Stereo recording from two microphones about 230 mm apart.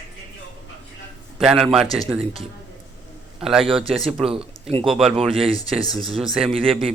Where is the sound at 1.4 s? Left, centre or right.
Centre.